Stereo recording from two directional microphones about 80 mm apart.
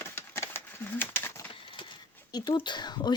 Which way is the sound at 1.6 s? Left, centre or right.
Left.